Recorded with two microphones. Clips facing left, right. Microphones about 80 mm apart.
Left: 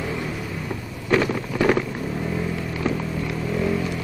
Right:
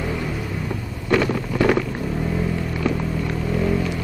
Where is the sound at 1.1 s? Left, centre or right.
Centre.